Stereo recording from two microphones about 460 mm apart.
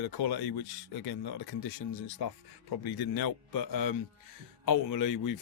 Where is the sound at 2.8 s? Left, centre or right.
Left.